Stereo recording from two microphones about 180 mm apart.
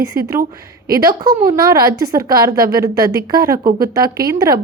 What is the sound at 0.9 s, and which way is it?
Speech, 20° right (ahead or behind).